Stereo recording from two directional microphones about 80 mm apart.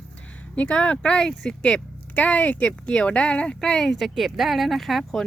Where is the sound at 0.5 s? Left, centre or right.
Centre.